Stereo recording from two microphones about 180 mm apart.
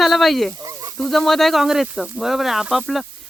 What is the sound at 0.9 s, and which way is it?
Speech, centre (ahead or behind).